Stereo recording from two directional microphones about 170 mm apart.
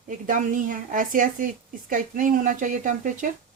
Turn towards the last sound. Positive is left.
turn(degrees=-50)  # may be behind; listen again after turning